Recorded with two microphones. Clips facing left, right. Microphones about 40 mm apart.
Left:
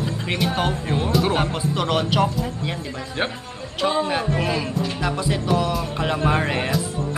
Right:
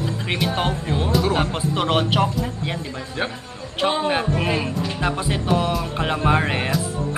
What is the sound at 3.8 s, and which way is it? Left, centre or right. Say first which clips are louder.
Speech: right 1 dB; right.